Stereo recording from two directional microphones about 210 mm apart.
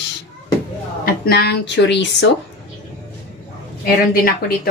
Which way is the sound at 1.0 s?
45° left (ahead or behind).